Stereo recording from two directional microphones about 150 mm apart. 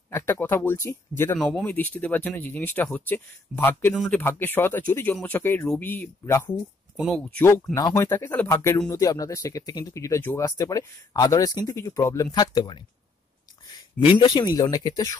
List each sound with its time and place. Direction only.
0.1 s speech: 15° left (ahead or behind)
1.4 s speech: 10° left (ahead or behind)
7.0 s speech: 5° left (ahead or behind); by 12.8 s 30° left (ahead or behind)
13.9 s speech: 30° left (ahead or behind)